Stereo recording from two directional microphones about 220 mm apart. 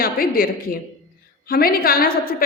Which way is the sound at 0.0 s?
40° left (ahead or behind).